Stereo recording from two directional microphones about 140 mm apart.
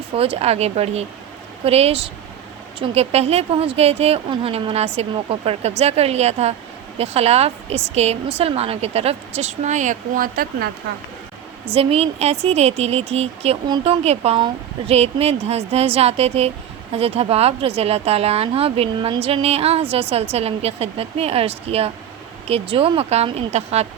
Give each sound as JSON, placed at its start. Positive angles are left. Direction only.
{"t": 0.1, "sound": "speech", "side_deg": -45}
{"t": 11.6, "sound": "speech", "side_deg": -45}
{"t": 14.3, "sound": "speech", "side_deg": -35}
{"t": 14.9, "sound": "speech", "side_deg": -45}